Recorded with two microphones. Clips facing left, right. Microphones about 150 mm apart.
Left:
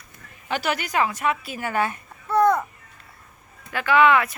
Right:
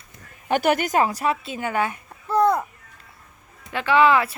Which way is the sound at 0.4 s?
50° right (ahead or behind).